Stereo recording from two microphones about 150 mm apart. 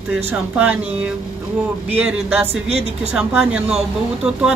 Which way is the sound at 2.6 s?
45° right (ahead or behind).